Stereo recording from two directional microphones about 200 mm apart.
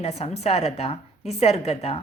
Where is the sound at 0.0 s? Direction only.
35° left (ahead or behind).